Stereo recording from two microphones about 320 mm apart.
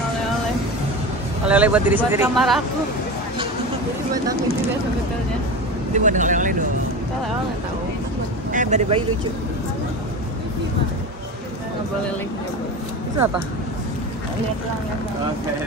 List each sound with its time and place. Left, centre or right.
1.5 s speech: centre
5.9 s speech: right
8.5 s a man's voice: right